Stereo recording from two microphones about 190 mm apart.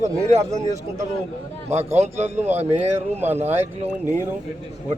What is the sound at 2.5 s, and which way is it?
Speech, 10° right (ahead or behind).